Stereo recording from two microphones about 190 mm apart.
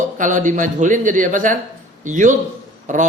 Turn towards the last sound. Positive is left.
turn(degrees=-40)  # may be behind; listen again after turning